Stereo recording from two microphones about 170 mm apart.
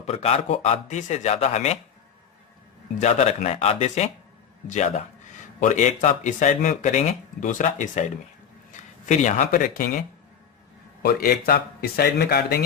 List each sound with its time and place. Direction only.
0.0 s speech: 40° left (ahead or behind)
3.0 s speech: 40° left (ahead or behind)
5.5 s speech: 45° left (ahead or behind)
11.0 s a man's voice: 65° left (ahead or behind)